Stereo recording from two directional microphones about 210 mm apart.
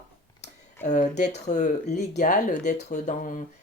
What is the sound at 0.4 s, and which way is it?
Speech, 35° left (ahead or behind).